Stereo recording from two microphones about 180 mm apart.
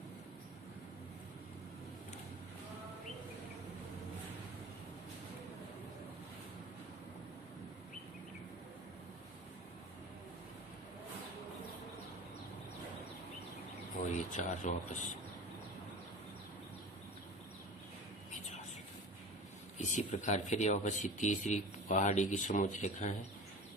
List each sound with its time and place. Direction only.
14.1 s speech: 40° left (ahead or behind)
19.8 s speech: 40° left (ahead or behind)